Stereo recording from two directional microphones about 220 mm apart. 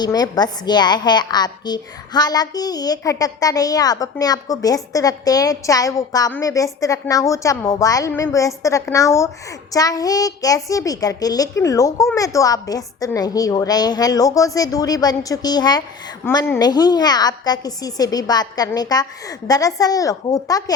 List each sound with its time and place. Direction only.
0.0 s a woman's voice: 20° left (ahead or behind)